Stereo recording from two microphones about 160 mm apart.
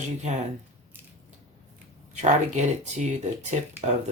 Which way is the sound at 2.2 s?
45° right (ahead or behind).